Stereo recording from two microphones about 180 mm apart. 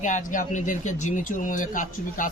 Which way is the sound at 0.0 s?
45° left (ahead or behind).